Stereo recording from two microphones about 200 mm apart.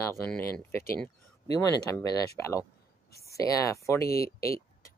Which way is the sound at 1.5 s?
15° left (ahead or behind).